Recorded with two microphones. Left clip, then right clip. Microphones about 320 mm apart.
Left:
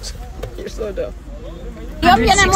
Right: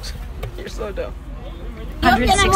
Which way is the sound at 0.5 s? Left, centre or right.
Centre.